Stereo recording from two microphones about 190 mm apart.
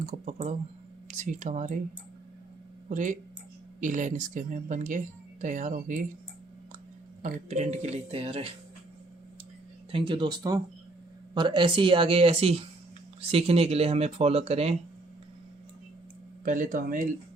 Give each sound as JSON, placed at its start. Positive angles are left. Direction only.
{"t": 0.0, "sound": "speech", "side_deg": -40}
{"t": 2.9, "sound": "speech", "side_deg": -40}
{"t": 7.2, "sound": "speech", "side_deg": -40}
{"t": 9.9, "sound": "speech", "side_deg": -25}
{"t": 16.4, "sound": "speech", "side_deg": -45}